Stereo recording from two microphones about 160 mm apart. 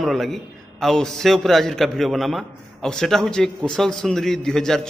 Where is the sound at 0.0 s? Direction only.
Centre (ahead or behind).